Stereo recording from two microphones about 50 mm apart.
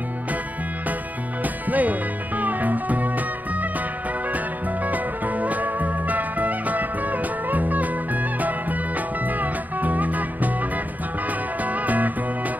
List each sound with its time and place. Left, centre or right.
1.4 s music: right
4.8 s music: right
11.6 s music: right